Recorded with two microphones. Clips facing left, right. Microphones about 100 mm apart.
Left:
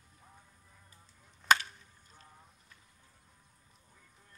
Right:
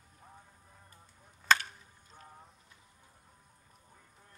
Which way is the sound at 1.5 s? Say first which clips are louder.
Left 1 dB; 10° left (ahead or behind).